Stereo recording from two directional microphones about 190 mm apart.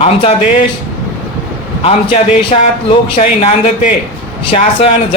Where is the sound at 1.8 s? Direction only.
30° left (ahead or behind).